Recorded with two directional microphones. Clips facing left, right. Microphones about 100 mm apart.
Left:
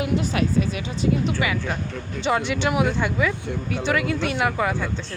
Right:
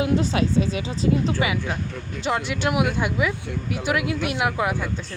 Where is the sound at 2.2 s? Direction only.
Centre (ahead or behind).